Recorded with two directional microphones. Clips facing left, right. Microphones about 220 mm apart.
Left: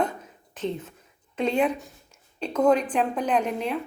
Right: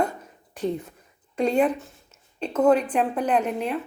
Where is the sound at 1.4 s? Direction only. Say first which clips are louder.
Right 2 dB; 5° right (ahead or behind).